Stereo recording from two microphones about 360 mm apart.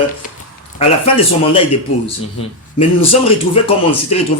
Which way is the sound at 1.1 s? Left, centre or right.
Centre.